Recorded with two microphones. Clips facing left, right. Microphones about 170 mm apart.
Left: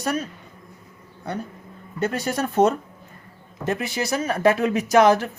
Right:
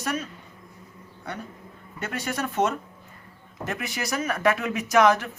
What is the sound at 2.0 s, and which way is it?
Speech, 35° left (ahead or behind).